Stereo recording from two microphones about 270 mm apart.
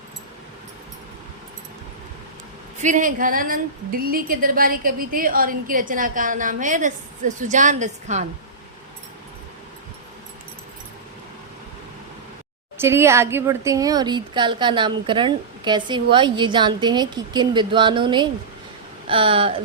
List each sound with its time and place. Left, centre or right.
2.7 s a woman's voice: right
12.8 s a woman's voice: centre